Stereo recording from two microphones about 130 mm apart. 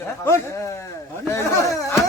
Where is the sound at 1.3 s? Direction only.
25° left (ahead or behind).